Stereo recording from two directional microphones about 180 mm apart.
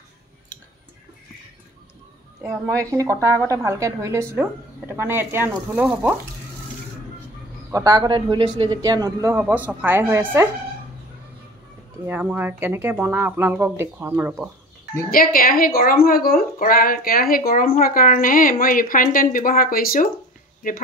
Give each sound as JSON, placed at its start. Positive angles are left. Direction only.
{"t": 2.4, "sound": "a woman's voice", "side_deg": -15}
{"t": 7.7, "sound": "a man's voice", "side_deg": -20}
{"t": 9.4, "sound": "a woman's voice", "side_deg": -10}
{"t": 12.1, "sound": "a woman's voice", "side_deg": -10}
{"t": 15.0, "sound": "speech", "side_deg": 50}